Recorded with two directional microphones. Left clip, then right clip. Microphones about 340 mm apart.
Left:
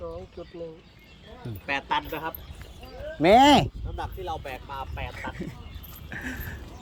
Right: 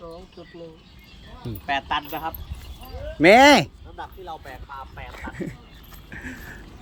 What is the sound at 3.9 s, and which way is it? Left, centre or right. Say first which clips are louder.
Speech: left 3 dB; left.